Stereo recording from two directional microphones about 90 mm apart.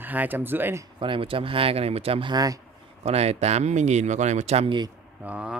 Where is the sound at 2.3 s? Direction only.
40° right (ahead or behind).